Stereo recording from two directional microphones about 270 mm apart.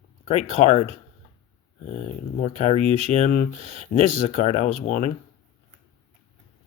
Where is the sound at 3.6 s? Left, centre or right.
Right.